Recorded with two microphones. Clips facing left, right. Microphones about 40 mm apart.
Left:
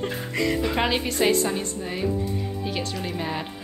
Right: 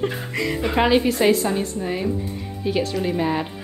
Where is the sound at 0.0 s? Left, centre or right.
Centre.